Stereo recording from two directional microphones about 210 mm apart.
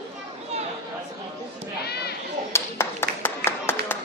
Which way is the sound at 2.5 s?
10° left (ahead or behind).